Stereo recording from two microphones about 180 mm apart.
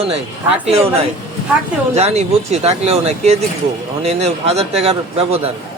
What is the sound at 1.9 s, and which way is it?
Speech, 35° right (ahead or behind).